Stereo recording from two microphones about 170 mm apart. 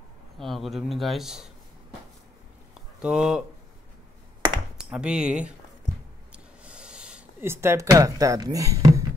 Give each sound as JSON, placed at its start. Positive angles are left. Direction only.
{"t": 0.4, "sound": "a man's voice", "side_deg": 0}
{"t": 3.0, "sound": "a man's voice", "side_deg": -5}
{"t": 4.7, "sound": "speech", "side_deg": -5}
{"t": 6.3, "sound": "a sound", "side_deg": -5}